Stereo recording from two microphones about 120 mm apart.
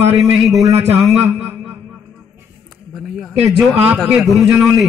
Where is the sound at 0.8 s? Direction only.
15° right (ahead or behind).